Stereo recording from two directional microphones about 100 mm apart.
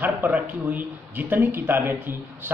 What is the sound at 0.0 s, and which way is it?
A man's voice, 20° right (ahead or behind).